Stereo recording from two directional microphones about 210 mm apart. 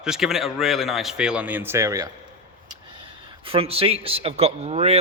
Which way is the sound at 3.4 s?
25° right (ahead or behind).